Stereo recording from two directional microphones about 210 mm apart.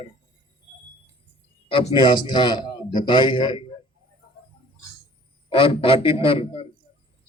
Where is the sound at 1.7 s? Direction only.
25° left (ahead or behind).